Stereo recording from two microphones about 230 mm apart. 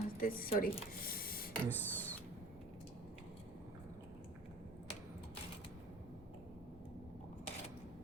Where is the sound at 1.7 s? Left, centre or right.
Centre.